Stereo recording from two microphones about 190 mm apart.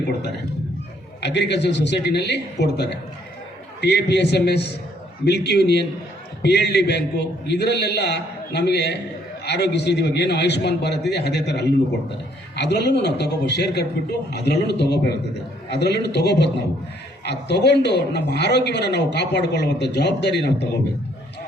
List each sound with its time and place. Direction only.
1.2 s a man's voice: 65° left (ahead or behind)